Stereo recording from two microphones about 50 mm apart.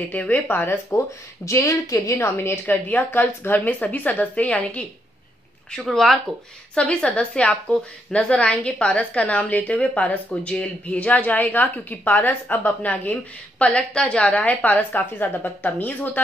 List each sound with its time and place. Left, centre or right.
0.1 s a woman's voice: left
0.7 s speech: left
2.2 s a woman's voice: left
3.1 s a woman's voice: left
5.8 s speech: centre
6.7 s a woman's voice: left